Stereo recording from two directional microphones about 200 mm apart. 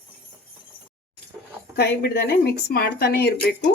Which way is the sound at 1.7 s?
55° left (ahead or behind).